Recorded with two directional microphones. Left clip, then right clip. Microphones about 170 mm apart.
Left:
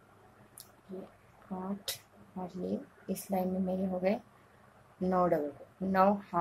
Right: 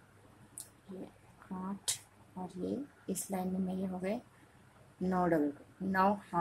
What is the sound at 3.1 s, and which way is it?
Speech, 25° right (ahead or behind).